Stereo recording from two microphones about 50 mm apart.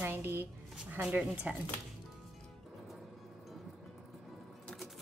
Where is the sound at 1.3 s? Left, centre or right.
Right.